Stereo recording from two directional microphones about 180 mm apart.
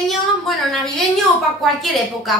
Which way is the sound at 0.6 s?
Centre (ahead or behind).